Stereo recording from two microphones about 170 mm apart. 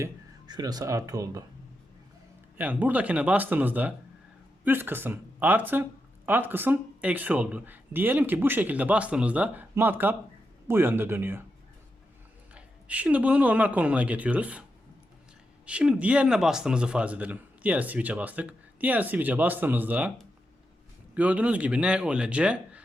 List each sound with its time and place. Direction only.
0.0 s speech: 20° right (ahead or behind)
2.6 s speech: 10° right (ahead or behind)
12.5 s speech: 10° right (ahead or behind)
15.6 s speech: 5° right (ahead or behind)
21.2 s speech: 5° right (ahead or behind)